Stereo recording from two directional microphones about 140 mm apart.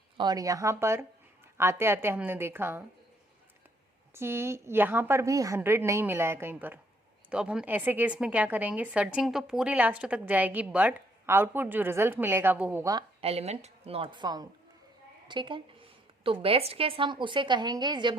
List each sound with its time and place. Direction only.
0.2 s a woman's voice: 25° right (ahead or behind)
4.1 s a woman's voice: 20° right (ahead or behind)
12.8 s speech: 25° right (ahead or behind)
13.2 s a woman's voice: 50° right (ahead or behind); by 18.2 s 30° right (ahead or behind)